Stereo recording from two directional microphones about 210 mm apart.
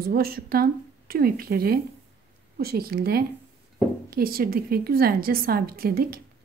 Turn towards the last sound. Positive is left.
turn(degrees=-45)  # may be behind; listen again after turning